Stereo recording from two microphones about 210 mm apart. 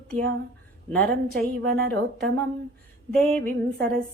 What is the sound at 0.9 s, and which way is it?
Speech, 5° left (ahead or behind).